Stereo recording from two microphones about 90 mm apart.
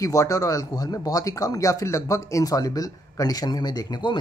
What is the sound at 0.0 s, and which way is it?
Speech, 40° left (ahead or behind).